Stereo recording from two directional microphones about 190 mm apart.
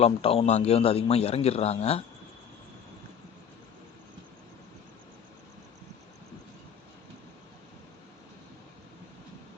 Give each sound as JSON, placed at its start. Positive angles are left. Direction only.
{"t": 0.0, "sound": "a man's voice", "side_deg": 30}